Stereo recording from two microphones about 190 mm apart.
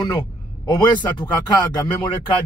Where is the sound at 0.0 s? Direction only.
20° left (ahead or behind).